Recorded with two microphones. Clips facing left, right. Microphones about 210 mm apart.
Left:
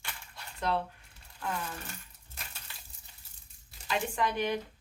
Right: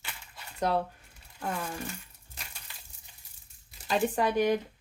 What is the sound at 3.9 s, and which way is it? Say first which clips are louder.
Speech: right 5 dB; 40° right (ahead or behind).